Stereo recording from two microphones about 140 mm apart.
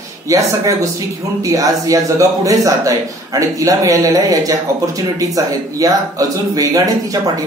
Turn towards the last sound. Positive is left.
turn(degrees=-25)  # may be behind; listen again after turning